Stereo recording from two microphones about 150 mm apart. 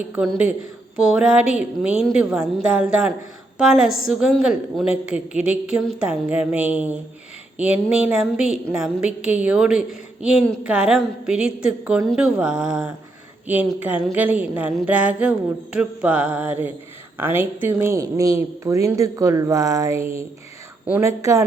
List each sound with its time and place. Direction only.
0.2 s a woman's voice: 10° right (ahead or behind)